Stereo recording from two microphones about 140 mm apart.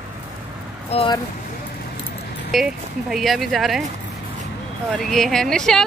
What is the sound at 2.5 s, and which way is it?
A woman's voice, centre (ahead or behind).